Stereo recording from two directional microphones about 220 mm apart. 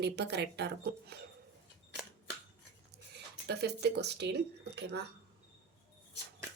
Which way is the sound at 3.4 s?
50° right (ahead or behind).